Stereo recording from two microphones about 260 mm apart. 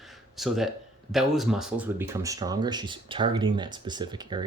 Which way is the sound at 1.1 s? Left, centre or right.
Centre.